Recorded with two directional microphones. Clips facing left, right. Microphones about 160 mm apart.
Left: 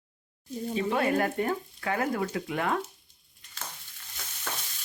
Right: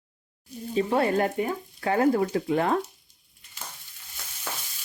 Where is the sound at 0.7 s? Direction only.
35° right (ahead or behind).